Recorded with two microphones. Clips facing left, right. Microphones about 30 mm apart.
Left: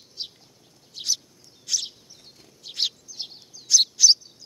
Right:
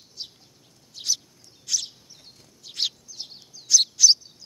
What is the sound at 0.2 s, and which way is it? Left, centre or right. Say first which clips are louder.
Bird: left 3 dB; left.